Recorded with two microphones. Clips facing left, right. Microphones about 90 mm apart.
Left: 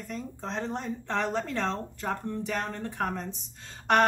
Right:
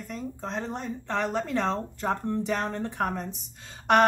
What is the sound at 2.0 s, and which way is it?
Speech, 30° right (ahead or behind).